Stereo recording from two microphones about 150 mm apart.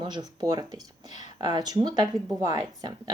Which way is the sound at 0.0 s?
30° right (ahead or behind).